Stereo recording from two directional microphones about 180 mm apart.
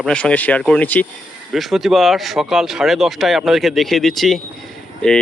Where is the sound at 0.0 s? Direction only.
5° left (ahead or behind).